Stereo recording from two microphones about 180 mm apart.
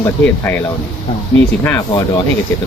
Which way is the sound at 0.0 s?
10° left (ahead or behind).